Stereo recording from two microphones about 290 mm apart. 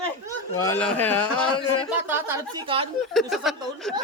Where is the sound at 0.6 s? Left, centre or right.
Centre.